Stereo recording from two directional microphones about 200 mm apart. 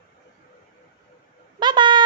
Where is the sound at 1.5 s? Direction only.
20° right (ahead or behind).